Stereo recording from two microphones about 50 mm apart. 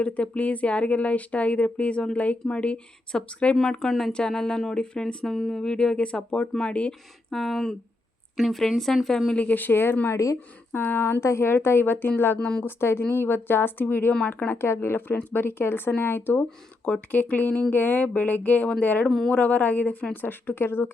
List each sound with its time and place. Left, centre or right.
0.0 s speech: left
5.2 s speech: centre; by 6.9 s left
7.3 s speech: centre
8.4 s a woman's voice: centre
9.0 s speech: centre
9.3 s speech: left
10.1 s speech: left
11.0 s a woman's voice: left
12.4 s speech: left
12.6 s a woman's voice: left
14.6 s a woman's voice: left
16.8 s speech: left
20.2 s a woman's voice: left